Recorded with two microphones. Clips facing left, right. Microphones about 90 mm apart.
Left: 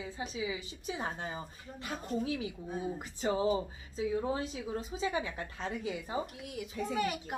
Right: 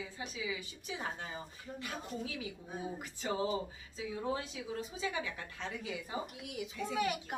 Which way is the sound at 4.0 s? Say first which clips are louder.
Left 5 dB; 40° left (ahead or behind).